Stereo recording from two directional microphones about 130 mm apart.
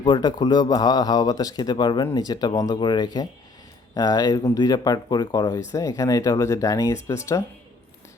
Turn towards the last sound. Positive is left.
turn(degrees=25)  # may be behind; listen again after turning